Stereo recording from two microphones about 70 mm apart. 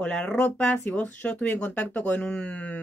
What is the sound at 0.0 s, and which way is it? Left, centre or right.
Speech, centre.